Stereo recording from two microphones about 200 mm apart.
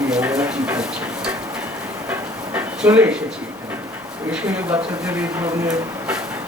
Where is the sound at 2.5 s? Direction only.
10° right (ahead or behind).